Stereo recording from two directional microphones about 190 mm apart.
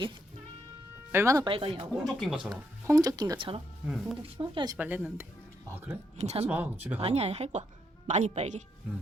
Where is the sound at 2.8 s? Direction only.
20° right (ahead or behind).